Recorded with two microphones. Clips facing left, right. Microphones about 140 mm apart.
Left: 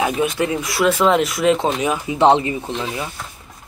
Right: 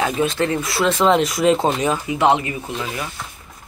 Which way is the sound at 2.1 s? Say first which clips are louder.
Left 5 dB; 30° left (ahead or behind).